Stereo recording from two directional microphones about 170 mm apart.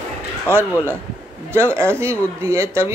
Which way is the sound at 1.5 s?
15° right (ahead or behind).